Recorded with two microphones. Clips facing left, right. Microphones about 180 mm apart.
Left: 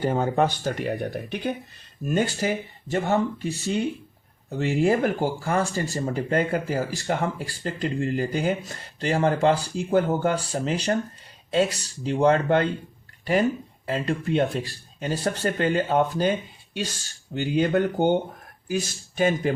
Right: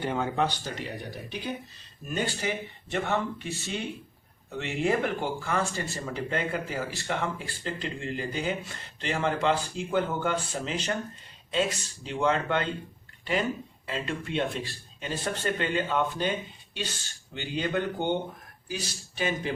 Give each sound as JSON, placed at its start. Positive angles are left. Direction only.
{"t": 0.0, "sound": "speech", "side_deg": 40}
{"t": 2.0, "sound": "speech", "side_deg": 45}
{"t": 13.8, "sound": "speech", "side_deg": 40}
{"t": 17.3, "sound": "speech", "side_deg": 45}